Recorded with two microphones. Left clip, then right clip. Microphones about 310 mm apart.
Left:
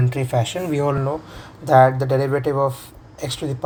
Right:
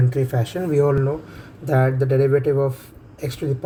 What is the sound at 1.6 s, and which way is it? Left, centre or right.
Speech, left.